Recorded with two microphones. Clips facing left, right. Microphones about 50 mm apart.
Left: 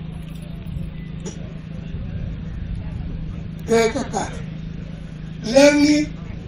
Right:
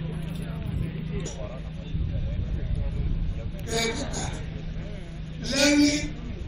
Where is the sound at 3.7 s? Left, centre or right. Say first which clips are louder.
Left 12 dB; left.